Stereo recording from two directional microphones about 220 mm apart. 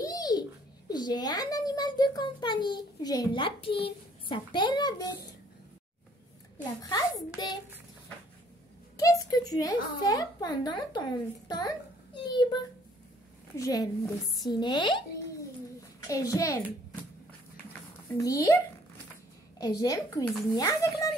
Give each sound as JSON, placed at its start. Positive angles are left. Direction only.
{"t": 0.0, "sound": "a child's voice", "side_deg": 15}
{"t": 6.8, "sound": "speech", "side_deg": 15}
{"t": 8.9, "sound": "speech", "side_deg": 15}
{"t": 16.1, "sound": "speech", "side_deg": 15}
{"t": 18.1, "sound": "speech", "side_deg": 15}
{"t": 19.8, "sound": "speech", "side_deg": 15}